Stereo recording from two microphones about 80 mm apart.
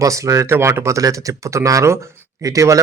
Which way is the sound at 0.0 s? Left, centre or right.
Right.